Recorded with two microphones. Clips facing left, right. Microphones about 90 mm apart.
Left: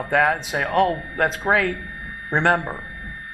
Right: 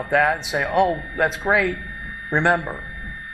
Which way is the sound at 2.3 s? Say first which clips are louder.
Even; 50° left (ahead or behind).